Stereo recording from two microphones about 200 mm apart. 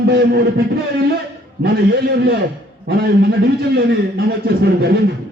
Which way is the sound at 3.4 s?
50° right (ahead or behind).